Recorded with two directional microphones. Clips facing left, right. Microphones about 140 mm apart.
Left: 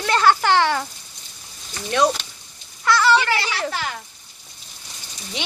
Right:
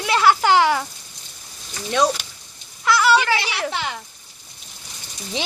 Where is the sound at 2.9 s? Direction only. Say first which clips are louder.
Even; 10° right (ahead or behind).